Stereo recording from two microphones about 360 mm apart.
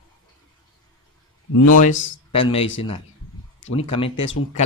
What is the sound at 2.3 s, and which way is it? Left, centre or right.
Speech, centre.